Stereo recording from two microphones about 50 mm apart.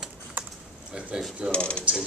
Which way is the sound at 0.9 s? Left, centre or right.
Centre.